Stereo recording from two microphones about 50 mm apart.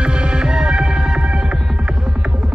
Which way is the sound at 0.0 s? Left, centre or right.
Centre.